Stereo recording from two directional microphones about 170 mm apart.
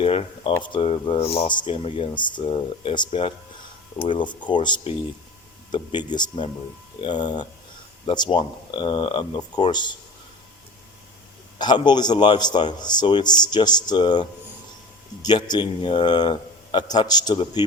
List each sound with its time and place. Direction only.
0.0 s a man's voice: 35° left (ahead or behind)
11.5 s a man's voice: 25° left (ahead or behind)